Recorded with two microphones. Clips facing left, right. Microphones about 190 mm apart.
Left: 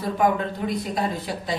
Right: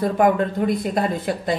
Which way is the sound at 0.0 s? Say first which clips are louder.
Right 4 dB; 50° right (ahead or behind).